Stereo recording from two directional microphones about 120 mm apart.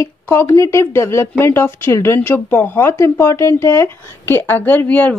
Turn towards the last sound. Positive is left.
turn(degrees=15)  # may be behind; listen again after turning